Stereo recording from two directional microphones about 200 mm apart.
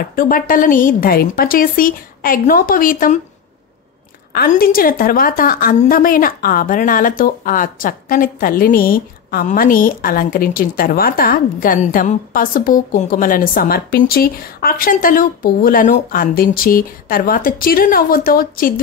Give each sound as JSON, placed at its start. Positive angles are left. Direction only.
{"t": 0.0, "sound": "a woman's voice", "side_deg": 45}
{"t": 4.3, "sound": "a woman's voice", "side_deg": 50}